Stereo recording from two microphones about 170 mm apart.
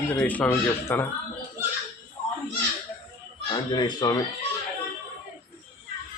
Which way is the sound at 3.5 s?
25° left (ahead or behind).